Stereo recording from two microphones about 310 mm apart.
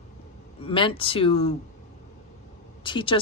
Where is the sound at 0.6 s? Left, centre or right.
Centre.